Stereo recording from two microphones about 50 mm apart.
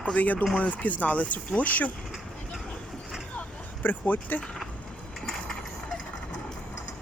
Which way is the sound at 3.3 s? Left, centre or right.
Left.